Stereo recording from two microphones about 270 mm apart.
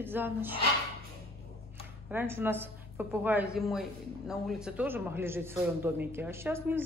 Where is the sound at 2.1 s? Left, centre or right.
Centre.